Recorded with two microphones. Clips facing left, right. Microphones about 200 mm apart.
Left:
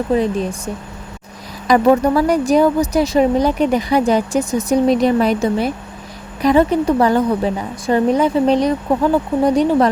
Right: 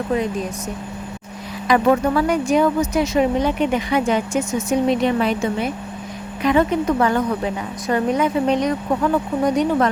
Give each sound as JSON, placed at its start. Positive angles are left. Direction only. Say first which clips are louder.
{"t": 0.1, "sound": "speech", "louder": "left 5 dB", "side_deg": 30}
{"t": 1.6, "sound": "speech", "louder": "left 4 dB", "side_deg": 40}